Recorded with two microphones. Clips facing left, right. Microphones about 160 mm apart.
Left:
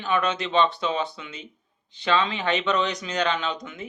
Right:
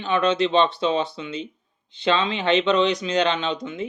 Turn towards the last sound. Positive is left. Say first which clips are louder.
# right 5 dB
turn(degrees=-25)  # may be behind; listen again after turning